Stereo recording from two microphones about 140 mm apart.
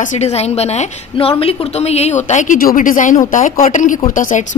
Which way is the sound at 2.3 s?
65° left (ahead or behind).